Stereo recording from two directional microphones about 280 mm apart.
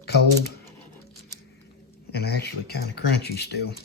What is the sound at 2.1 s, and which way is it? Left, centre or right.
Speech, left.